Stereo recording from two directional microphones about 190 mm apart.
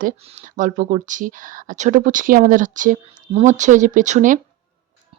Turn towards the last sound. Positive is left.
turn(degrees=-40)  # may be behind; listen again after turning